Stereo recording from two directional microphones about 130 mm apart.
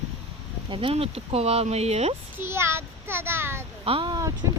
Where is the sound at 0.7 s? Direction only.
45° right (ahead or behind).